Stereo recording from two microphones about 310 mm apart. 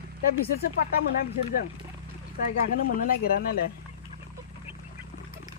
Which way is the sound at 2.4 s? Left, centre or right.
Left.